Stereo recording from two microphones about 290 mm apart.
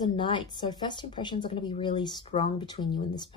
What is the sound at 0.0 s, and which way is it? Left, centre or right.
Speech, centre.